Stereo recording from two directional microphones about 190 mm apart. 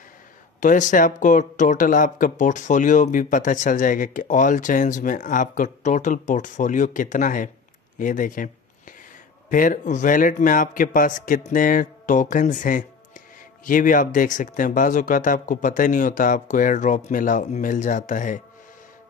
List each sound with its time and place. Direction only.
0.6 s speech: 40° left (ahead or behind)
9.5 s speech: 45° left (ahead or behind)